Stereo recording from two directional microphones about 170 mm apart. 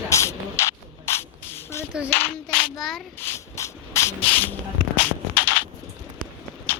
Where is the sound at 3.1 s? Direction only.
15° left (ahead or behind).